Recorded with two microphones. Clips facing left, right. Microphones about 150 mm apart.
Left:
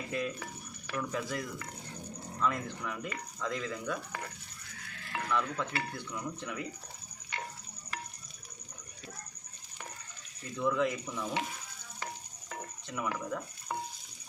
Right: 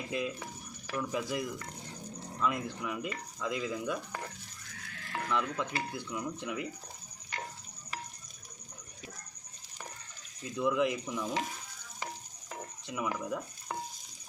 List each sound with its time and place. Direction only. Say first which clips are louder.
0.1 s speech: even; 15° right (ahead or behind)
5.3 s speech: even; 15° right (ahead or behind)
10.4 s speech: right 1 dB; 15° right (ahead or behind)
12.9 s speech: right 1 dB; 15° right (ahead or behind)